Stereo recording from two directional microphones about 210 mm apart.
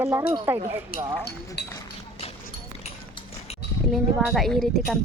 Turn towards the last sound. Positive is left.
turn(degrees=0)  # may be behind; listen again after turning